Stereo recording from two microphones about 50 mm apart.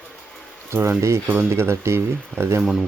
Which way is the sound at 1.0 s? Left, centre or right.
Right.